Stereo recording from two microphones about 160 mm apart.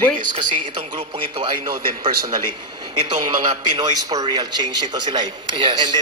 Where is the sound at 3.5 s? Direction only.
25° right (ahead or behind).